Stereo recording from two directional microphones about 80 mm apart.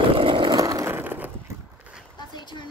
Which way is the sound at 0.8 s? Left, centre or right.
Right.